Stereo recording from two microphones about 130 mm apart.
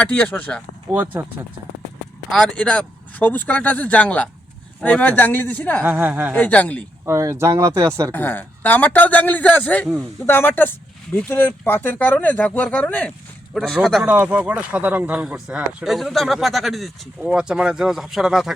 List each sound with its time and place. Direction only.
0.0 s speech: 10° left (ahead or behind)
2.3 s speech: 5° left (ahead or behind)
5.8 s a woman's voice: 15° right (ahead or behind)
6.3 s speech: 10° left (ahead or behind)
7.0 s speech: 20° right (ahead or behind)
8.1 s speech: 15° left (ahead or behind)
14.0 s speech: 10° right (ahead or behind)